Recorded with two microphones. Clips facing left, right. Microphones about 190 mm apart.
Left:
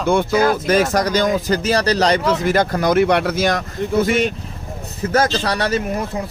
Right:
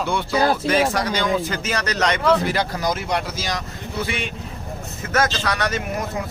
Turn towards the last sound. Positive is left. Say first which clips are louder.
# left 4 dB
turn(degrees=35)  # may be behind; listen again after turning